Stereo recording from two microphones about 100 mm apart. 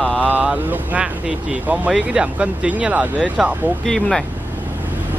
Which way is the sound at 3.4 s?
Centre (ahead or behind).